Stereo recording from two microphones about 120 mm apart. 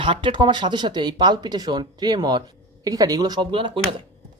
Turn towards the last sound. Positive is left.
turn(degrees=-45)  # may be behind; listen again after turning